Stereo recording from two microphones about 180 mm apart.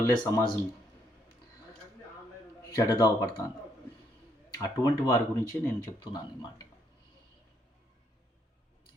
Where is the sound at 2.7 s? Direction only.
20° left (ahead or behind).